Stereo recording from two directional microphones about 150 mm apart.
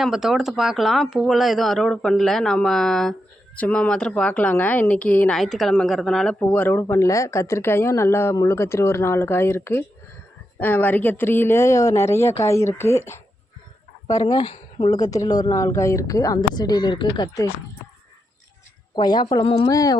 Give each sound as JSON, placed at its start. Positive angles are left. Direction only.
{"t": 0.0, "sound": "speech", "side_deg": -5}
{"t": 6.4, "sound": "speech", "side_deg": 15}
{"t": 18.9, "sound": "speech", "side_deg": 30}